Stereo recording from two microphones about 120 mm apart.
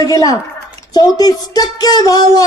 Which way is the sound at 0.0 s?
30° left (ahead or behind).